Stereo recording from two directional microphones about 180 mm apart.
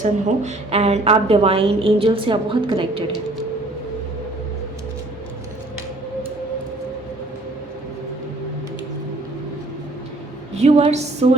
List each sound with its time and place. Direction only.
0.0 s a woman's voice: 40° right (ahead or behind)
10.5 s a woman's voice: 35° right (ahead or behind)